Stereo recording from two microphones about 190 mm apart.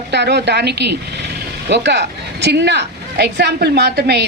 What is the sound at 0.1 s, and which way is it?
A woman's voice, 65° right (ahead or behind).